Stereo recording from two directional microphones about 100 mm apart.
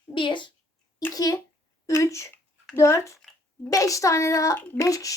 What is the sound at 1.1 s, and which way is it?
Speech, 35° left (ahead or behind).